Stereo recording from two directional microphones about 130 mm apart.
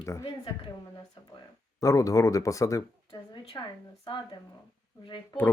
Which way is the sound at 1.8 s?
25° left (ahead or behind).